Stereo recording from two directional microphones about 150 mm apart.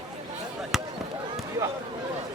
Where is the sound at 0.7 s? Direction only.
Centre (ahead or behind).